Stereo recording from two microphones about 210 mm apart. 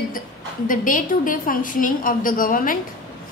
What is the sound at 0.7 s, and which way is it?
A woman's voice, 40° left (ahead or behind).